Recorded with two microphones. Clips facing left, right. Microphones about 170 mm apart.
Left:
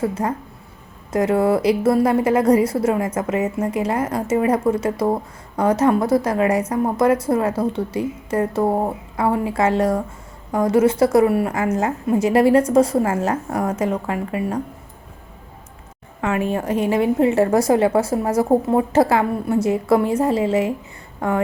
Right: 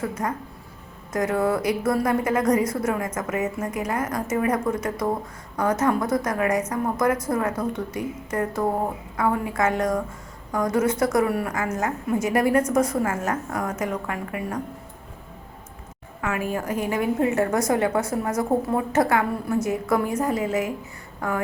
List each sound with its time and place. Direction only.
0.0 s speech: 30° left (ahead or behind)
16.2 s a woman's voice: 25° left (ahead or behind)